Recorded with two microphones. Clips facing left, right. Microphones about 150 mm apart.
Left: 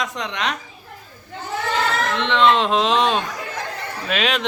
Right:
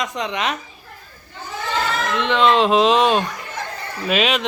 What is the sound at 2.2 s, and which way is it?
A man's voice, 5° right (ahead or behind).